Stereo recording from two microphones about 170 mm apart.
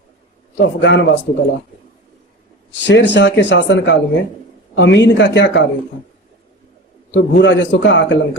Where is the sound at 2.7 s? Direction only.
90° left.